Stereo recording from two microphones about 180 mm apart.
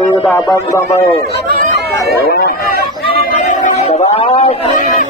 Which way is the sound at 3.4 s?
40° left (ahead or behind).